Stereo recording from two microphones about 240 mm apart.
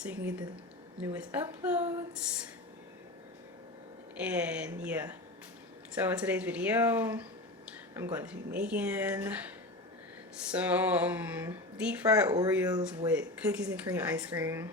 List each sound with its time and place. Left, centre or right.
0.0 s speech: centre
4.2 s a woman's voice: centre
10.5 s speech: centre